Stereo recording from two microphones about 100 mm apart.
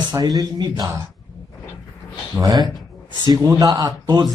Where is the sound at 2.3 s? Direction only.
35° right (ahead or behind).